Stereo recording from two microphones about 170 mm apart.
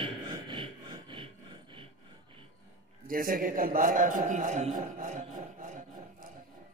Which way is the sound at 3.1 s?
55° right (ahead or behind).